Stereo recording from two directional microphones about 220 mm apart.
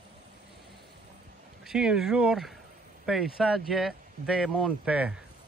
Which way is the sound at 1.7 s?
5° right (ahead or behind).